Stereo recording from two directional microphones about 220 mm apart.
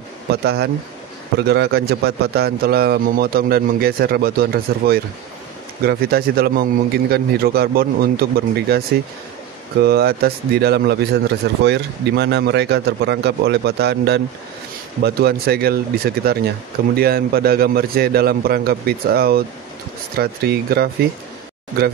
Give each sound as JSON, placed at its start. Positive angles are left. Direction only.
{"t": 0.3, "sound": "speech", "side_deg": -45}